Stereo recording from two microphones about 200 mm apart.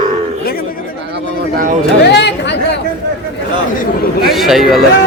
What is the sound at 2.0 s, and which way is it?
Chatter, 60° left (ahead or behind).